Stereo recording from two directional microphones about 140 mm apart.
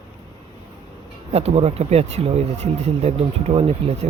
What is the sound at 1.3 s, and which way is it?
Speech, 45° right (ahead or behind).